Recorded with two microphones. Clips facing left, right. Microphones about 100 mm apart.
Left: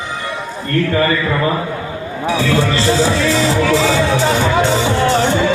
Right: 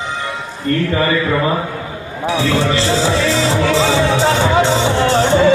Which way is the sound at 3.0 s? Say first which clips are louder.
Left 1 dB; 25° right (ahead or behind).